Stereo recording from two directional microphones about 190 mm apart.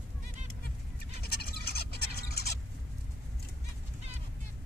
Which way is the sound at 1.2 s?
55° left (ahead or behind).